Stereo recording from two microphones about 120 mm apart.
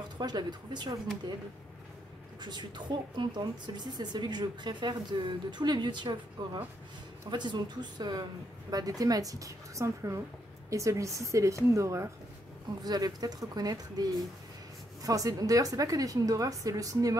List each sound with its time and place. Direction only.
0.2 s speech: 35° right (ahead or behind)
2.4 s a woman's voice: 40° right (ahead or behind)
15.0 s a woman's voice: 30° right (ahead or behind)